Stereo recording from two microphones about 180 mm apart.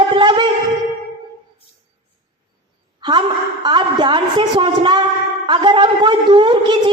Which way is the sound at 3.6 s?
25° right (ahead or behind).